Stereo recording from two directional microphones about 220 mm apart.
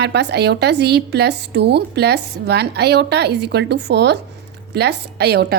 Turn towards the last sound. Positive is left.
turn(degrees=-45)  # may be behind; listen again after turning